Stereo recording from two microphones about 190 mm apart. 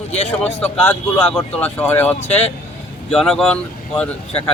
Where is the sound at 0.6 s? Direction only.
5° left (ahead or behind).